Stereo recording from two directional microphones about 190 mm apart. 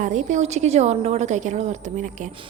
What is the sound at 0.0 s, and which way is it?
A woman's voice, 40° right (ahead or behind).